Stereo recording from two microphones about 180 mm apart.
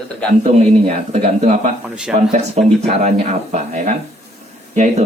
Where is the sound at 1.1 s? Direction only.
40° right (ahead or behind).